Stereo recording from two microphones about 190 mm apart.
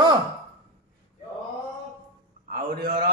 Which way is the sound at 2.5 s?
55° right (ahead or behind).